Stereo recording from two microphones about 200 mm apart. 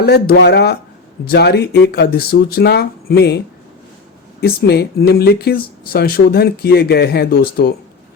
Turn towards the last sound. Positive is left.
turn(degrees=50)  # may be behind; listen again after turning